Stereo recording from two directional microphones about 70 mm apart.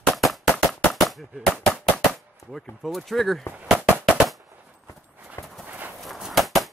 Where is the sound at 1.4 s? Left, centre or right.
Centre.